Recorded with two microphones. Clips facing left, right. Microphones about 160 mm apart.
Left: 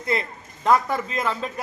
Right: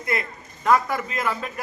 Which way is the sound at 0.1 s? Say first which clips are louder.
Left 2 dB; 30° left (ahead or behind).